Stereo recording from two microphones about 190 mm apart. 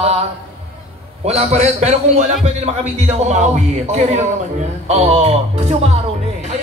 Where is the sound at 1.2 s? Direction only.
35° right (ahead or behind).